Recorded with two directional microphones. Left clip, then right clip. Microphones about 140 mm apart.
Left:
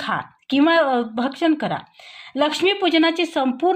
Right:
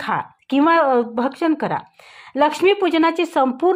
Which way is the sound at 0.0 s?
35° right (ahead or behind).